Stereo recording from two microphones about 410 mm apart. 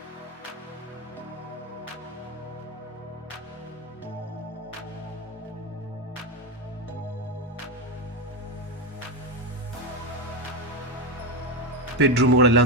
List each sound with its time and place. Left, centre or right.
11.9 s a man's voice: right